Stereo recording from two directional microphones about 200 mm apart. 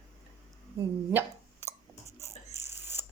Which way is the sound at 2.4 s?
35° left (ahead or behind).